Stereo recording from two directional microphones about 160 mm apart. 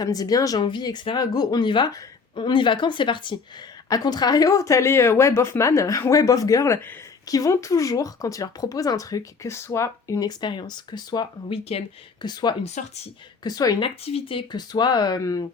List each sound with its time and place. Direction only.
0.0 s speech: 25° left (ahead or behind)
12.8 s speech: 50° left (ahead or behind)
13.4 s speech: 25° left (ahead or behind)